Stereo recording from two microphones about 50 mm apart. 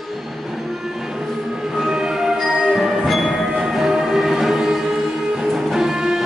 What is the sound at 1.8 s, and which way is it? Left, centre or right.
Music, centre.